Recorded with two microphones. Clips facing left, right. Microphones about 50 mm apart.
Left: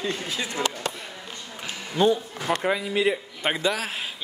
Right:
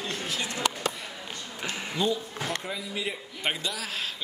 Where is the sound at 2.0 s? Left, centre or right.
Left.